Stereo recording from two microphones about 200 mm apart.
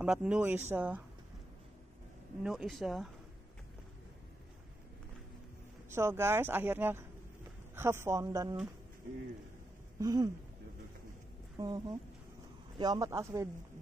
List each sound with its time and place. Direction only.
0.0 s speech: 5° right (ahead or behind)
2.4 s speech: centre (ahead or behind)
5.9 s speech: 15° right (ahead or behind)
9.9 s speech: 20° right (ahead or behind)
11.5 s speech: 20° right (ahead or behind)